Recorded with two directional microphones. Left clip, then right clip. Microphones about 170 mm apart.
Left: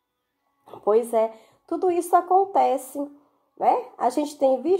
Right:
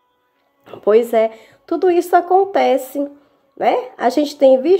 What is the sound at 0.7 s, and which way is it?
Speech, 20° right (ahead or behind).